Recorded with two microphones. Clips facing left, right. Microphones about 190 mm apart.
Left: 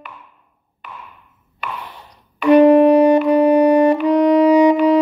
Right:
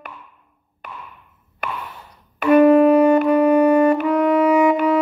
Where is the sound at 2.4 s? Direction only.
15° left (ahead or behind).